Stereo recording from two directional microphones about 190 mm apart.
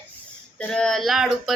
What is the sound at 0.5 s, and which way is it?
Female singing, 5° left (ahead or behind).